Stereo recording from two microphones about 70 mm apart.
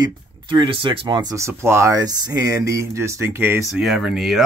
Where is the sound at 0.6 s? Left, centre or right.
Right.